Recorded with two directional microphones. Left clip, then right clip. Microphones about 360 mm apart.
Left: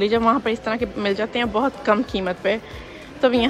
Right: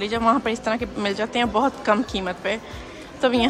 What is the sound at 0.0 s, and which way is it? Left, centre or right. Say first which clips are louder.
A woman's voice: left 2 dB; centre.